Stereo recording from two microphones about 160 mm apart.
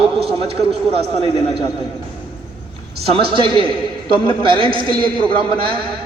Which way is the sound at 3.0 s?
35° right (ahead or behind).